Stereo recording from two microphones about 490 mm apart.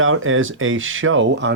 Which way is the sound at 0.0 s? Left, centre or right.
Right.